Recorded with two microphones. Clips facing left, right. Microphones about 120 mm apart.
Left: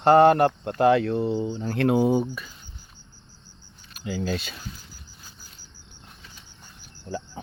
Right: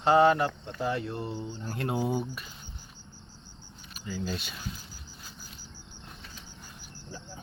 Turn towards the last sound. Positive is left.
turn(degrees=90)